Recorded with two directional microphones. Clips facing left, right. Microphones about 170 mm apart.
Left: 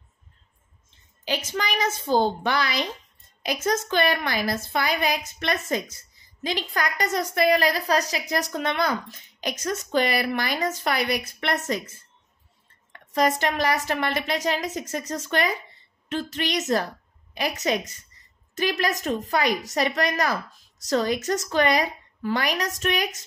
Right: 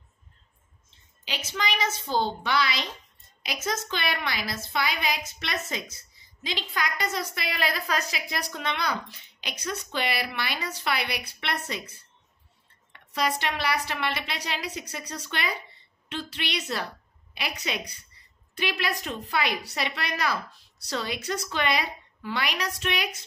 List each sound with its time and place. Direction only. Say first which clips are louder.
1.2 s a woman's voice: left 4 dB; 45° left (ahead or behind)